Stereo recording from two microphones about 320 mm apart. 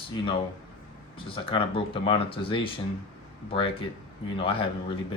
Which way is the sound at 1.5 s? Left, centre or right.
Centre.